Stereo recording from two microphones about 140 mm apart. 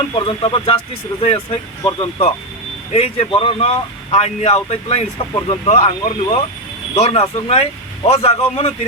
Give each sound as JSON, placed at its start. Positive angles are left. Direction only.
{"t": 0.2, "sound": "speech", "side_deg": 35}
{"t": 1.1, "sound": "speech", "side_deg": 20}
{"t": 1.8, "sound": "speech", "side_deg": 35}